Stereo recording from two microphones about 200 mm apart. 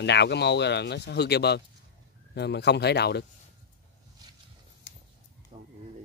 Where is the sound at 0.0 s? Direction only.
60° left (ahead or behind).